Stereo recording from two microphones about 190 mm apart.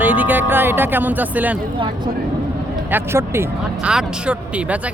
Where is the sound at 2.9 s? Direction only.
10° right (ahead or behind).